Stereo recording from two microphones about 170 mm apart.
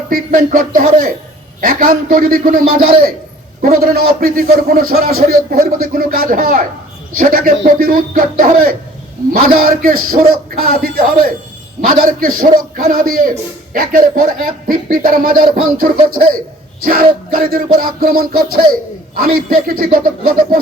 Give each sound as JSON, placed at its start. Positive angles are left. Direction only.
{"t": 0.1, "sound": "speech", "side_deg": -50}
{"t": 1.6, "sound": "music", "side_deg": -55}